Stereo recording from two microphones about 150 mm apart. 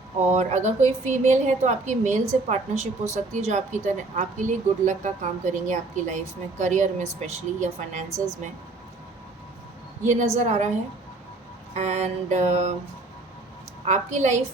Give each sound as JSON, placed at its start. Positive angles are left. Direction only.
{"t": 0.3, "sound": "a woman's voice", "side_deg": -50}
{"t": 10.0, "sound": "a woman's voice", "side_deg": -55}
{"t": 11.7, "sound": "a woman's voice", "side_deg": -50}
{"t": 13.8, "sound": "a woman's voice", "side_deg": -50}